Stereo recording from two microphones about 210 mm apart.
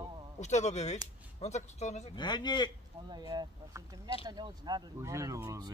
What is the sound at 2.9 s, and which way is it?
Speech, 25° right (ahead or behind).